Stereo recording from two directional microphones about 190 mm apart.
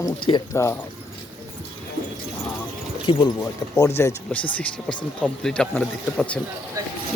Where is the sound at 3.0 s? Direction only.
20° left (ahead or behind).